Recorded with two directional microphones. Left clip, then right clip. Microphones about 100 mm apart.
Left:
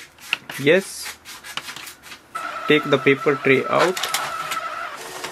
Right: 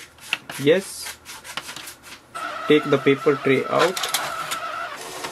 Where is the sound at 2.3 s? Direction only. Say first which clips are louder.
Left 1 dB; 10° left (ahead or behind).